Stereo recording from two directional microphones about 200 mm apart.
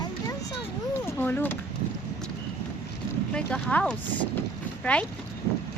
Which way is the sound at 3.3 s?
5° left (ahead or behind).